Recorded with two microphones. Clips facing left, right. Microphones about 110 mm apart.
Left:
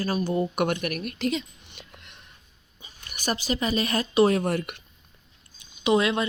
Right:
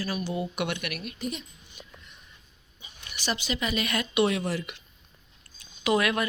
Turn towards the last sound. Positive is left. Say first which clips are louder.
# left 3 dB
turn(degrees=25)  # may be behind; listen again after turning